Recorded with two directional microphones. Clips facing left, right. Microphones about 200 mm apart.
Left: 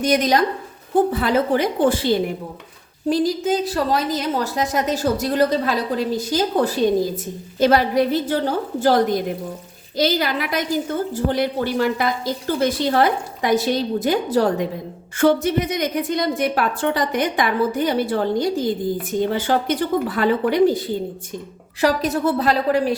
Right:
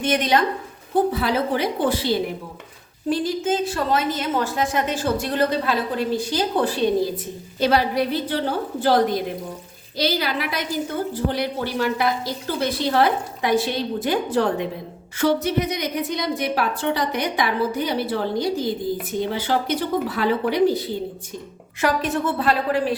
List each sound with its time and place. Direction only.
0.0 s a woman's voice: 40° left (ahead or behind)
15.2 s a woman's voice: 50° left (ahead or behind)
21.8 s a woman's voice: 35° left (ahead or behind)